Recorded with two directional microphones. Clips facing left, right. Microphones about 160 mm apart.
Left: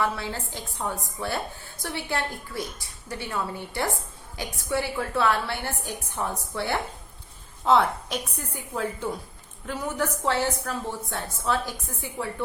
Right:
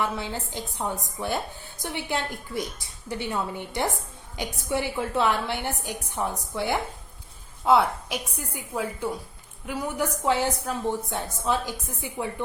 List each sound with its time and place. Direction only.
0.0 s a woman's voice: 20° right (ahead or behind)